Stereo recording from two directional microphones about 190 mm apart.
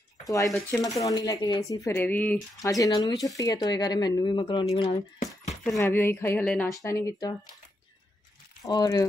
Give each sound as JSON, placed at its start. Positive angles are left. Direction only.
{"t": 0.5, "sound": "speech", "side_deg": 0}
{"t": 0.7, "sound": "speech", "side_deg": 15}
{"t": 4.7, "sound": "a sound", "side_deg": 30}
{"t": 5.8, "sound": "speech", "side_deg": 10}
{"t": 6.8, "sound": "speech", "side_deg": 15}
{"t": 8.6, "sound": "speech", "side_deg": 20}